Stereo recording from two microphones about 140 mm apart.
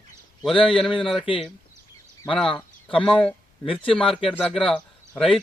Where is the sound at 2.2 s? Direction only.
5° left (ahead or behind).